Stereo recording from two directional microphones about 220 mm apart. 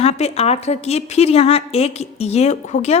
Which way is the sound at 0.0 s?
30° left (ahead or behind).